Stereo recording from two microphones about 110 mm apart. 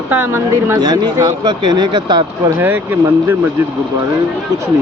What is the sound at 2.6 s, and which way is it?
Speech, 20° right (ahead or behind).